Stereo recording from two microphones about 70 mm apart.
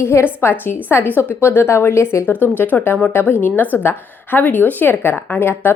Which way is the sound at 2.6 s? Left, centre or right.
Left.